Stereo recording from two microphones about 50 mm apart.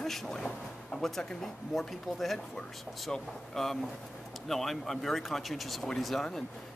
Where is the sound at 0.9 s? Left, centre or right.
Centre.